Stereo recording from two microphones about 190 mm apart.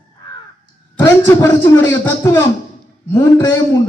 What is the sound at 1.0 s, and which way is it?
A man's voice, 15° left (ahead or behind).